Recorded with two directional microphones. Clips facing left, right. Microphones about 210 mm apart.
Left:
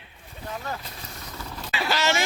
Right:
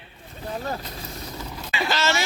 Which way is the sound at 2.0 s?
15° left (ahead or behind).